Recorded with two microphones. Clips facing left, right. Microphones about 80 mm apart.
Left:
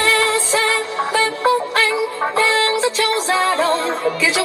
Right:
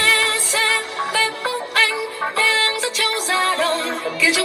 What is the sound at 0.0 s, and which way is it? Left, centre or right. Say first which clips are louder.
Music: left 3 dB; left.